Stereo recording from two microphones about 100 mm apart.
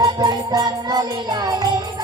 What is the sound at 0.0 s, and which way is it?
Music, 45° right (ahead or behind).